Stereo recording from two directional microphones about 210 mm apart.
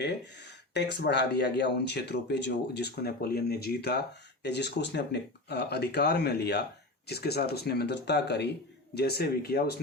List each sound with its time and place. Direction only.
0.7 s speech: 55° left (ahead or behind)